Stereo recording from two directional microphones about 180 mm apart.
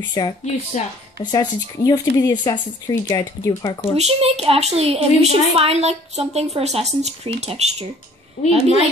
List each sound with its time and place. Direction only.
0.2 s speech: 20° left (ahead or behind)
3.9 s a woman's voice: 35° right (ahead or behind)